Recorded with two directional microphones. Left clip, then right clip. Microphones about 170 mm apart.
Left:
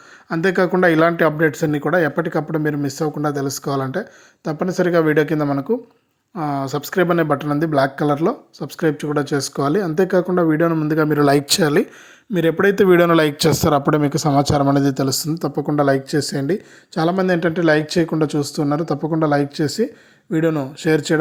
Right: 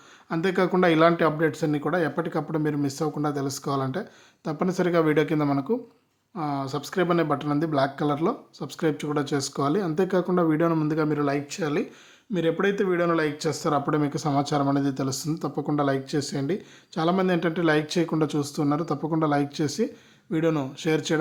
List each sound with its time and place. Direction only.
0.3 s speech: 20° left (ahead or behind)
10.9 s speech: 25° left (ahead or behind)
11.2 s speech: 55° left (ahead or behind)
12.3 s speech: 35° left (ahead or behind)
12.7 s speech: 55° left (ahead or behind); by 21.2 s 25° left (ahead or behind)